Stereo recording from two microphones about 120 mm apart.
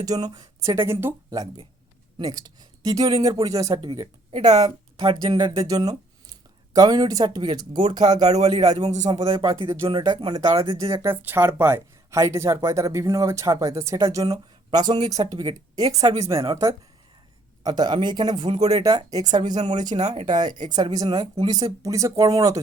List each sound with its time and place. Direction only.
0.0 s speech: 30° right (ahead or behind)
8.3 s a man's voice: 60° right (ahead or behind)
8.8 s a man's voice: 70° right (ahead or behind)
9.0 s a man's voice: 35° right (ahead or behind)
10.6 s speech: 30° right (ahead or behind)
17.6 s speech: 35° right (ahead or behind)
18.8 s speech: 30° right (ahead or behind)
19.4 s a man's voice: 75° right (ahead or behind)
19.6 s speech: 35° right (ahead or behind)
20.0 s speech: 65° right (ahead or behind)
20.7 s speech: 35° right (ahead or behind)